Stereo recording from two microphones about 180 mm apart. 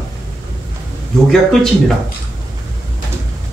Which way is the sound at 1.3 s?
5° left (ahead or behind).